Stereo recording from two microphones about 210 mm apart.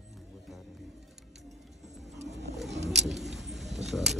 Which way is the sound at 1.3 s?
Centre (ahead or behind).